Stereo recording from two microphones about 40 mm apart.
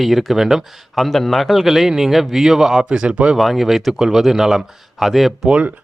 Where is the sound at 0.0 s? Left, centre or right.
Centre.